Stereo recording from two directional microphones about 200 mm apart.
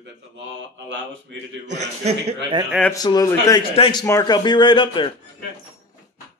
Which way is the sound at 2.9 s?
20° left (ahead or behind).